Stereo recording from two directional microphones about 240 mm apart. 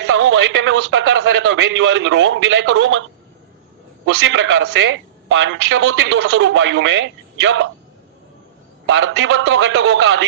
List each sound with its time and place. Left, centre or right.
0.0 s a man's voice: right
4.0 s a man's voice: right
8.9 s a man's voice: right